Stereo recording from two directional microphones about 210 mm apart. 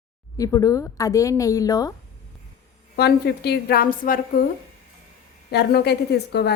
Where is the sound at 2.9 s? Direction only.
50° left (ahead or behind).